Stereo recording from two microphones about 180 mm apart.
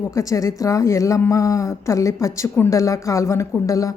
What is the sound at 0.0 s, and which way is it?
A woman's voice, 15° left (ahead or behind).